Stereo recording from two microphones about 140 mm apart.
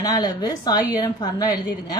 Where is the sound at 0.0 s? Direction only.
25° left (ahead or behind).